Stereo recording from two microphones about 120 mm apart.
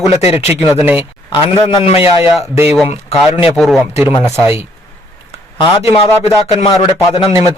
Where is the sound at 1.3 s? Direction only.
45° left (ahead or behind).